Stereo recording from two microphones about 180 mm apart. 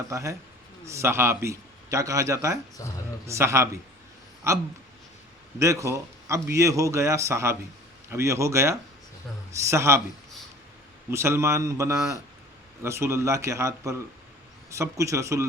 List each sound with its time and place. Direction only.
0.1 s a man's voice: 15° right (ahead or behind)
2.8 s speech: 20° left (ahead or behind)
3.2 s a man's voice: 15° right (ahead or behind)
11.1 s a man's voice: 15° right (ahead or behind)